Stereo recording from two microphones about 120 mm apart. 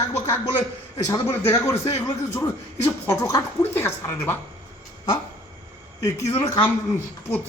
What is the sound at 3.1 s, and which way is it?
Speech, 25° left (ahead or behind).